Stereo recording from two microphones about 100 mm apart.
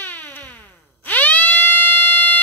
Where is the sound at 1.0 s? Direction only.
15° left (ahead or behind).